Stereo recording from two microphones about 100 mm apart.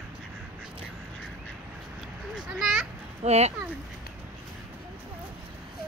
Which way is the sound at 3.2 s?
90° right.